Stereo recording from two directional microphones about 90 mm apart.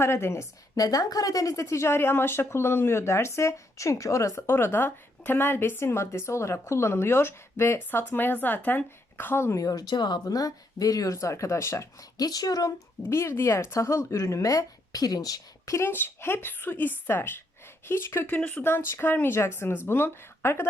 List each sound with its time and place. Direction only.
0.0 s speech: 30° left (ahead or behind)
0.8 s speech: 45° left (ahead or behind); by 9.6 s 25° left (ahead or behind)
9.6 s speech: 45° left (ahead or behind)
13.0 s speech: 30° left (ahead or behind)